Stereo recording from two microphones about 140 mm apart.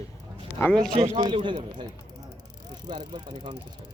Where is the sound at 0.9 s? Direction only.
40° right (ahead or behind).